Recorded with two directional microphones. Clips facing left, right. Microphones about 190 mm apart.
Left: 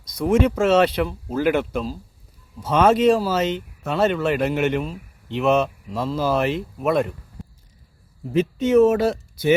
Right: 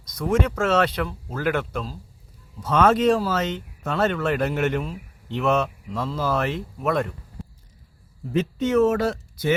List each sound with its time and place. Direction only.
0.0 s a sound: 10° left (ahead or behind)
0.4 s speech: 25° left (ahead or behind)
2.8 s speech: 10° left (ahead or behind)
5.4 s speech: 20° left (ahead or behind)
6.8 s speech: 10° left (ahead or behind)
8.4 s speech: 10° left (ahead or behind)